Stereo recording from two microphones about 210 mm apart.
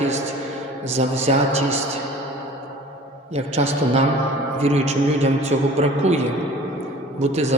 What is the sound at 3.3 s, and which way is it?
A man's voice, 30° right (ahead or behind).